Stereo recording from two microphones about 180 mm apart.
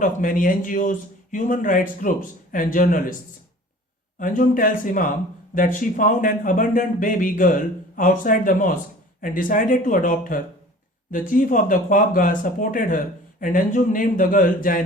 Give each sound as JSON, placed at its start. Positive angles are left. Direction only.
{"t": 0.0, "sound": "speech", "side_deg": 50}
{"t": 4.2, "sound": "speech", "side_deg": 50}